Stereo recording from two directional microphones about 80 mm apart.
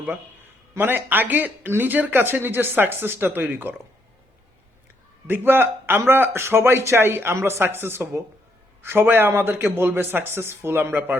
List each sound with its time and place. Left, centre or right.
0.7 s speech: right
5.3 s speech: right